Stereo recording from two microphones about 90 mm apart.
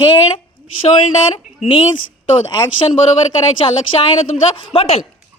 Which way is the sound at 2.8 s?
85° left.